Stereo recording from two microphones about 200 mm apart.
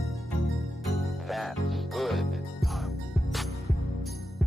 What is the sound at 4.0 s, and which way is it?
Heart sounds, centre (ahead or behind).